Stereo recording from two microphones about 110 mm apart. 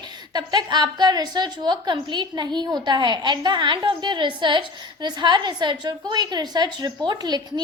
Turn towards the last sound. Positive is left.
turn(degrees=-40)  # may be behind; listen again after turning